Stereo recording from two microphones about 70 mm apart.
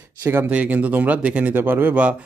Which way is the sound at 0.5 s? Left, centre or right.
Centre.